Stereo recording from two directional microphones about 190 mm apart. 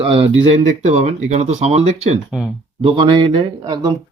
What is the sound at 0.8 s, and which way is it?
Speech, 40° right (ahead or behind).